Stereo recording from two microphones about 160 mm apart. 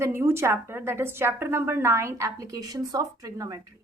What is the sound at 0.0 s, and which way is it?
A woman's voice, 15° right (ahead or behind).